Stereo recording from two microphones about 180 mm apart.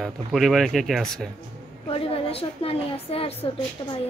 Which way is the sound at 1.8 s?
30° left (ahead or behind).